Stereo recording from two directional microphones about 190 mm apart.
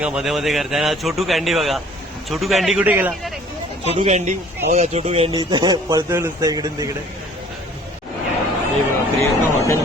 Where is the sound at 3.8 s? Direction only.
35° right (ahead or behind).